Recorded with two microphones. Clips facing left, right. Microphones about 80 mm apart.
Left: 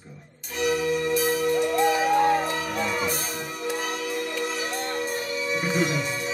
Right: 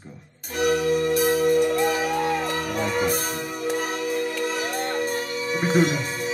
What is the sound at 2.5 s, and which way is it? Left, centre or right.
Music, right.